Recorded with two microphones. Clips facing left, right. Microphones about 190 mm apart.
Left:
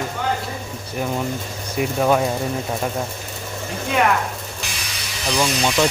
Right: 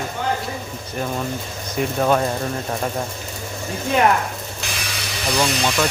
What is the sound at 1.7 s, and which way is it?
Speech, 5° left (ahead or behind).